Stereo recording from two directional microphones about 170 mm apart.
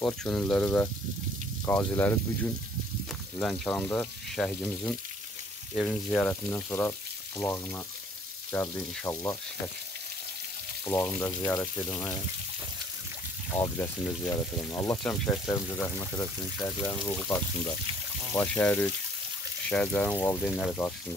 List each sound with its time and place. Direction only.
0.0 s speech: 5° left (ahead or behind)
3.3 s speech: 5° left (ahead or behind)
10.9 s speech: 15° left (ahead or behind)
13.6 s speech: 15° left (ahead or behind)
15.0 s speech: 5° left (ahead or behind)
20.4 s speech: centre (ahead or behind)